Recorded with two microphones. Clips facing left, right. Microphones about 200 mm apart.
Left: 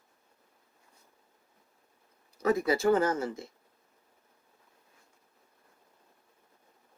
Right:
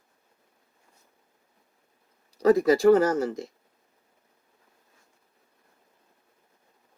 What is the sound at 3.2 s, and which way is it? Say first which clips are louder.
Speech: right 6 dB; 35° right (ahead or behind).